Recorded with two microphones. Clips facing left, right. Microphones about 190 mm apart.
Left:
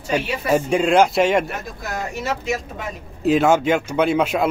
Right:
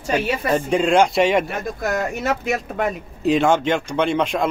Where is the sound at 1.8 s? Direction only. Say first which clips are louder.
Right 4 dB; 55° right (ahead or behind).